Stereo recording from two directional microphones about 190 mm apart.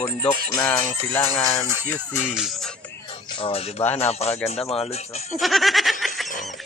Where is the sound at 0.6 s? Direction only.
10° left (ahead or behind).